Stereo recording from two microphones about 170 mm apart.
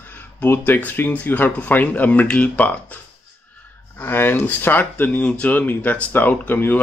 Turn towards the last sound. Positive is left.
turn(degrees=10)  # may be behind; listen again after turning